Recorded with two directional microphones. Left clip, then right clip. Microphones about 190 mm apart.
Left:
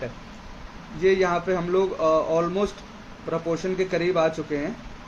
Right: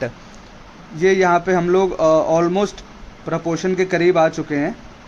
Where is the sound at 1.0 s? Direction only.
65° right (ahead or behind).